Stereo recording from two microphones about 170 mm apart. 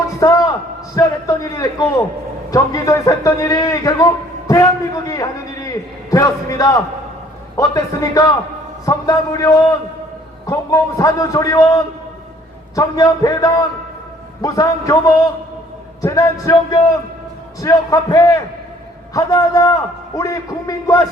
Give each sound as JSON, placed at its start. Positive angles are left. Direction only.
{"t": 0.2, "sound": "a man's voice", "side_deg": 20}